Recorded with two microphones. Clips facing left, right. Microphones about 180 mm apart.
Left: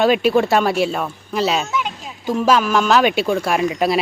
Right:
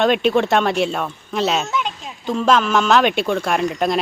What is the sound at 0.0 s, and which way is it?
Speech, 5° left (ahead or behind).